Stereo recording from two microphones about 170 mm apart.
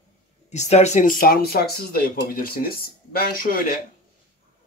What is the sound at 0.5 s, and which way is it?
Speech, 40° left (ahead or behind).